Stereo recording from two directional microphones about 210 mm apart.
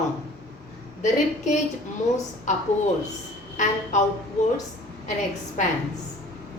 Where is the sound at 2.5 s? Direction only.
35° left (ahead or behind).